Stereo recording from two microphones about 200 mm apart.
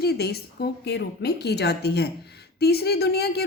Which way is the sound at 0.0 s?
55° left (ahead or behind).